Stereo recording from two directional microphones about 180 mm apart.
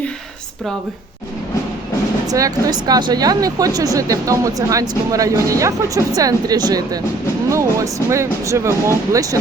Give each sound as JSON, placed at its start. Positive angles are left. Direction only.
{"t": 2.2, "sound": "speech", "side_deg": -20}